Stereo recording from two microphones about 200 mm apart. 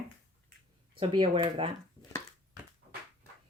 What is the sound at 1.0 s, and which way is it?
Speech, 25° right (ahead or behind).